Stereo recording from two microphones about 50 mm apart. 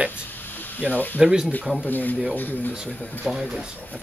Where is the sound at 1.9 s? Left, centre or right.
Left.